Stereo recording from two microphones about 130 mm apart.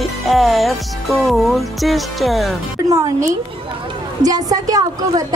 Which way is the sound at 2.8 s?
25° right (ahead or behind).